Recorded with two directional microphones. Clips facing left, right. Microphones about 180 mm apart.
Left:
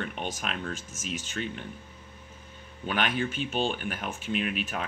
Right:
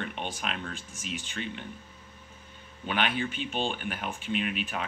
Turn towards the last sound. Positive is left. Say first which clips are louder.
# left 1 dB
turn(degrees=45)  # may be behind; listen again after turning